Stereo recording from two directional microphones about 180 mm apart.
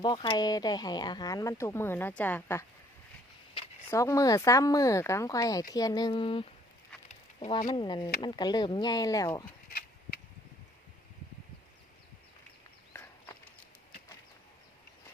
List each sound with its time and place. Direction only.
0.0 s speech: 25° left (ahead or behind)
3.8 s speech: 15° left (ahead or behind)
9.6 s a sound: 55° left (ahead or behind)